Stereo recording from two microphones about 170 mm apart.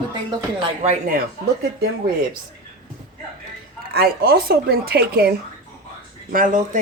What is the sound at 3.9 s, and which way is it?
Speech, 65° right (ahead or behind).